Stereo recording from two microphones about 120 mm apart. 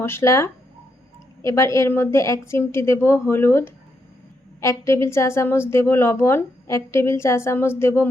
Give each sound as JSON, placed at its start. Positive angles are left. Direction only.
{"t": 0.0, "sound": "a woman's voice", "side_deg": 20}